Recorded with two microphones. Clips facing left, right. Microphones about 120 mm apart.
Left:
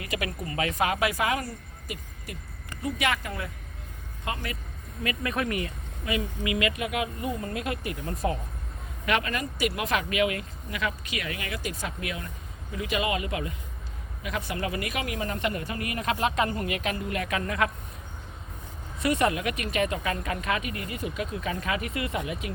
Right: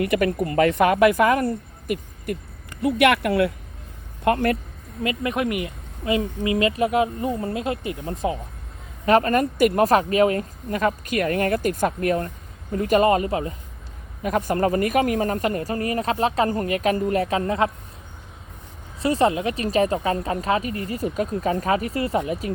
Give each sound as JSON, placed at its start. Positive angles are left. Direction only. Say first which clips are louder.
{"t": 0.0, "sound": "speech", "louder": "right 12 dB", "side_deg": -60}
{"t": 2.8, "sound": "speech", "louder": "right 10 dB", "side_deg": -65}
{"t": 4.2, "sound": "speech", "louder": "right 14 dB", "side_deg": -55}
{"t": 5.0, "sound": "speech", "louder": "right 5 dB", "side_deg": -20}
{"t": 6.1, "sound": "speech", "louder": "right 7 dB", "side_deg": -30}
{"t": 9.0, "sound": "speech", "louder": "right 10 dB", "side_deg": -40}
{"t": 18.9, "sound": "speech", "louder": "right 5 dB", "side_deg": -30}